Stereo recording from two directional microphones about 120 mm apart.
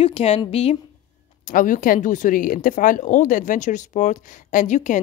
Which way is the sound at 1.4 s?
90° left.